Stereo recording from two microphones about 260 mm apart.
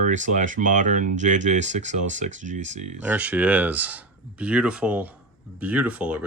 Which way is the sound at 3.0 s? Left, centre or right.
Centre.